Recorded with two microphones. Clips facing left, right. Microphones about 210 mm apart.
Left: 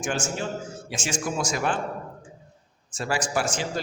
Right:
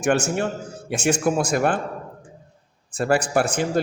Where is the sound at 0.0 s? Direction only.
65° right (ahead or behind).